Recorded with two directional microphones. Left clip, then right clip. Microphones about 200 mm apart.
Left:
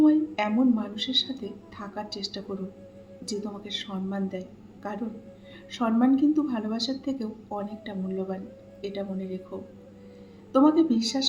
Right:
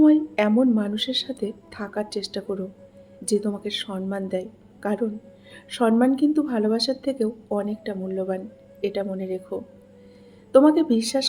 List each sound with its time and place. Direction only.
0.0 s a woman's voice: 50° right (ahead or behind)
10.5 s a woman's voice: 50° right (ahead or behind)